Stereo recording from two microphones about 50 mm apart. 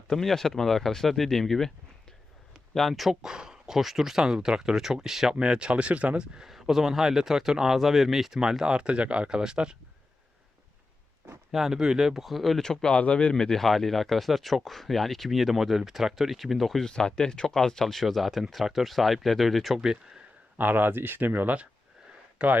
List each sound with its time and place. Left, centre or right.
0.1 s speech: centre
2.5 s a sound: centre
3.2 s speech: centre
5.3 s speech: centre
6.3 s speech: centre
11.5 s speech: centre
12.6 s speech: centre
16.8 s speech: centre
19.8 s speech: centre
20.6 s speech: right
22.4 s speech: right